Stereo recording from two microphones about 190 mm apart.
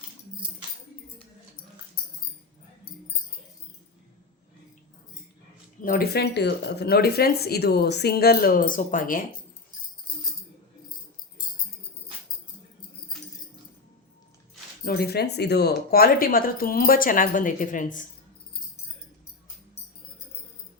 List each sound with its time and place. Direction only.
5.8 s speech: 50° left (ahead or behind)
14.8 s speech: 55° left (ahead or behind)